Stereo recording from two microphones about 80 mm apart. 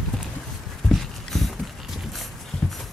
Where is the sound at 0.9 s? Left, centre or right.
Centre.